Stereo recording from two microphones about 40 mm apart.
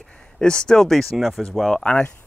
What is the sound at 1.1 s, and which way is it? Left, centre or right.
Speech, centre.